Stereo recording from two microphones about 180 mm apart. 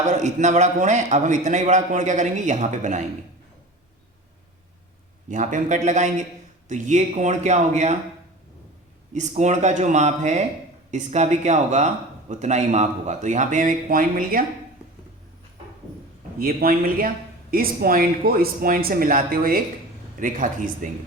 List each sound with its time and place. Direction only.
0.1 s a man's voice: 40° right (ahead or behind)
5.3 s a man's voice: 45° right (ahead or behind)
9.1 s a man's voice: 40° right (ahead or behind)
16.4 s a man's voice: 55° right (ahead or behind)